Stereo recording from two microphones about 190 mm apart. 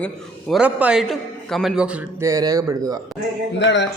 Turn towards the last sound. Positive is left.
turn(degrees=70)  # may be behind; listen again after turning